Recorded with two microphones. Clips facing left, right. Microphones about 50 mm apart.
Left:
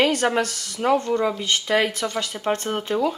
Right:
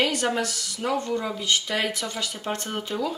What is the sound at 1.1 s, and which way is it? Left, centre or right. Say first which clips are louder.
Speech: left 4 dB; left.